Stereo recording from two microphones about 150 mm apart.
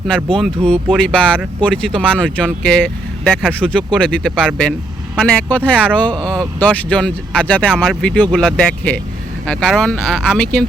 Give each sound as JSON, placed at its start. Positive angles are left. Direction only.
{"t": 0.3, "sound": "speech", "side_deg": 5}
{"t": 7.7, "sound": "speech", "side_deg": 0}
{"t": 8.1, "sound": "speech", "side_deg": 10}